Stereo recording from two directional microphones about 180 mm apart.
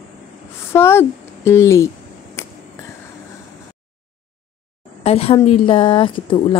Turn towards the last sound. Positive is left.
turn(degrees=30)  # may be behind; listen again after turning